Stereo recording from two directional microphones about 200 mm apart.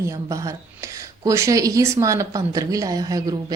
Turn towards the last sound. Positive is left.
turn(degrees=-15)  # may be behind; listen again after turning